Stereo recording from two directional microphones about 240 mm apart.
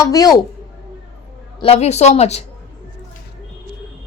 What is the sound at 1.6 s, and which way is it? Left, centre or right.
Speech, left.